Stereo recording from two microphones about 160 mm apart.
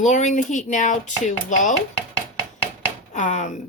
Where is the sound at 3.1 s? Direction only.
50° left (ahead or behind).